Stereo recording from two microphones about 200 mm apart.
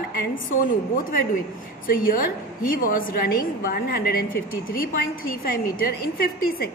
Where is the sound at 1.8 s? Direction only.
45° left (ahead or behind).